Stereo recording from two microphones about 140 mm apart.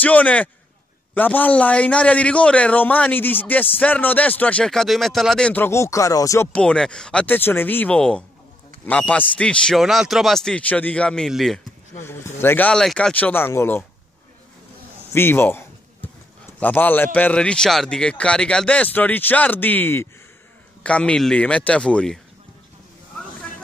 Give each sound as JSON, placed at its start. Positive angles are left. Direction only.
{"t": 0.0, "sound": "a man's voice", "side_deg": 10}
{"t": 6.5, "sound": "a man's voice", "side_deg": 5}
{"t": 12.0, "sound": "a man's voice", "side_deg": 15}
{"t": 15.1, "sound": "a sound", "side_deg": 15}
{"t": 16.5, "sound": "a man's voice", "side_deg": 15}